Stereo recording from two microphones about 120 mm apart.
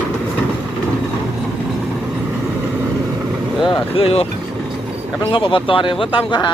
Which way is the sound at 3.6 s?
45° left (ahead or behind).